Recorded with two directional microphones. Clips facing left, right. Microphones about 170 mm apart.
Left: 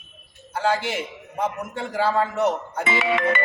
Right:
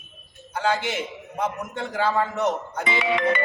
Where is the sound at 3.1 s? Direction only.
65° left (ahead or behind).